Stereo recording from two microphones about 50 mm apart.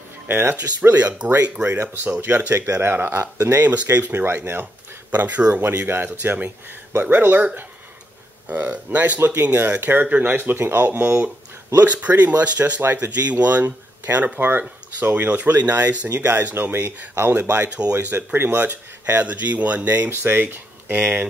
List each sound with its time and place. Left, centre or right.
0.3 s speech: right
0.6 s speech: right
3.5 s speech: right
5.1 s speech: right
5.6 s speech: right
16.2 s speech: right
17.8 s speech: right
18.1 s speech: right
20.1 s speech: right